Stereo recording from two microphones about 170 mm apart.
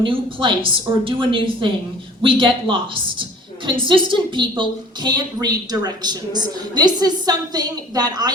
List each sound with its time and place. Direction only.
0.0 s a woman's voice: 30° right (ahead or behind)